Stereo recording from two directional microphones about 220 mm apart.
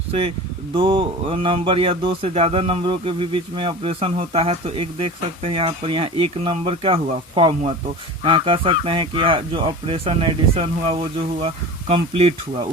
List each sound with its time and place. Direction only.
0.1 s speech: 25° right (ahead or behind)